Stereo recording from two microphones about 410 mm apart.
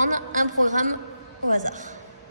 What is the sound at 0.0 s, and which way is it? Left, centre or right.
A woman's voice, centre.